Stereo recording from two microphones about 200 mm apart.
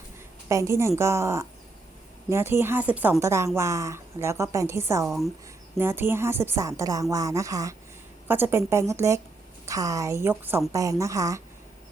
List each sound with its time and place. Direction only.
0.4 s speech: 15° right (ahead or behind)
5.0 s speech: centre (ahead or behind)
5.7 s speech: 10° right (ahead or behind)